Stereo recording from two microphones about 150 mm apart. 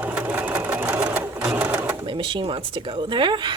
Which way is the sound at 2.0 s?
35° right (ahead or behind).